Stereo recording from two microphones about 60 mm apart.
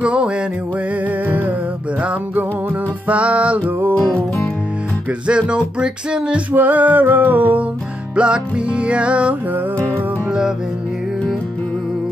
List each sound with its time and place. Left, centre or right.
0.0 s music: centre
1.2 s music: right
3.1 s music: right
5.2 s music: centre
6.5 s music: right
8.2 s music: centre